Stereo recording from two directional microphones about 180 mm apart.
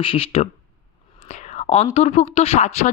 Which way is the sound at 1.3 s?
35° left (ahead or behind).